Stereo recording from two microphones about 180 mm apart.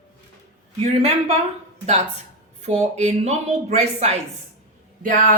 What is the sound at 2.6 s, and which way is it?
A woman's voice, 40° right (ahead or behind).